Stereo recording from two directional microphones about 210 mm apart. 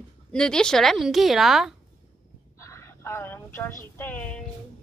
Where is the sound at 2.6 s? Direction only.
15° left (ahead or behind).